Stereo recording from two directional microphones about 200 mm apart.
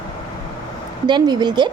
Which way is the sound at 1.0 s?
20° right (ahead or behind).